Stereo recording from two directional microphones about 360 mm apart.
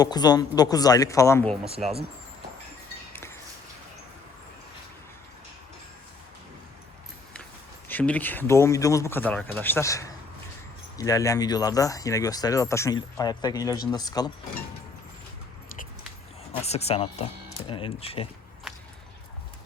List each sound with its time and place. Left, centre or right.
0.0 s speech: centre
3.1 s a sound: centre
7.9 s speech: centre
16.5 s speech: centre